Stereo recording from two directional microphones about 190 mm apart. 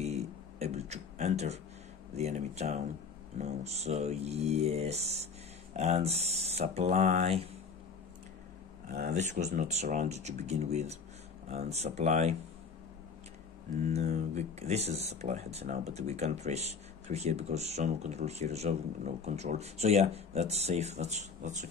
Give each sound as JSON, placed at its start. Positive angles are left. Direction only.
{"t": 0.0, "sound": "a sound", "side_deg": -35}
{"t": 2.1, "sound": "speech", "side_deg": -35}
{"t": 8.8, "sound": "speech", "side_deg": -40}
{"t": 13.8, "sound": "speech", "side_deg": -35}